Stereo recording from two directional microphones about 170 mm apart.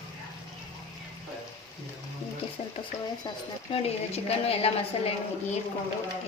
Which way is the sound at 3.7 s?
35° left (ahead or behind).